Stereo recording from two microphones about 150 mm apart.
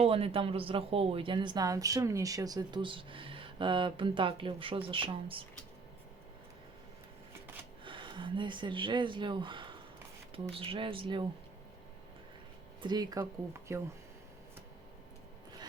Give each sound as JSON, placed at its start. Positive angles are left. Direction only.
{"t": 0.0, "sound": "a woman's voice", "side_deg": -40}
{"t": 7.9, "sound": "a woman's voice", "side_deg": -35}
{"t": 12.8, "sound": "speech", "side_deg": -30}